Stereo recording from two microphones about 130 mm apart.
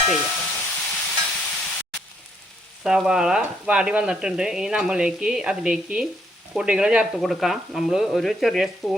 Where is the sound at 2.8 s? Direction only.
5° right (ahead or behind).